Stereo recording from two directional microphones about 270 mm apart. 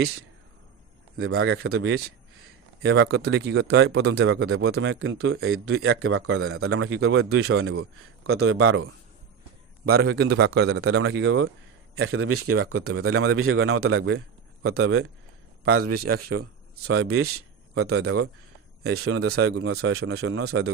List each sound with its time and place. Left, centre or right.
1.2 s speech: right
2.8 s speech: right
9.9 s a man's voice: right